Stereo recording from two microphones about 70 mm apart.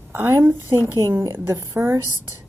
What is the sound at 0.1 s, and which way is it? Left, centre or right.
A woman's voice, right.